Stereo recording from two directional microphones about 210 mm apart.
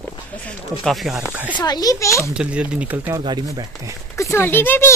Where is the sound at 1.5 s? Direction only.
20° left (ahead or behind).